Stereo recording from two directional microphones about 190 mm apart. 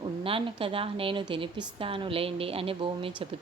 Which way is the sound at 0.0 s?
30° right (ahead or behind).